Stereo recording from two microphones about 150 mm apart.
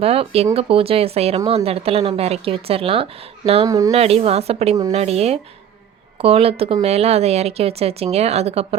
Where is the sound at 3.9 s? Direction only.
45° right (ahead or behind).